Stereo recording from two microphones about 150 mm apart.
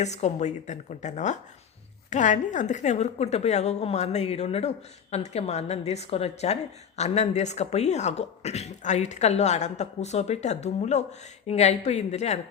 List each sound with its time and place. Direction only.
0.0 s speech: 50° left (ahead or behind)